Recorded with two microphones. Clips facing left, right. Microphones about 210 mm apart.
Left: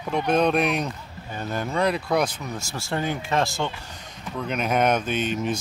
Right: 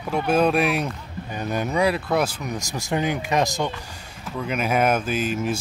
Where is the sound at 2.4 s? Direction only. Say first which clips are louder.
Right 3 dB; 15° right (ahead or behind).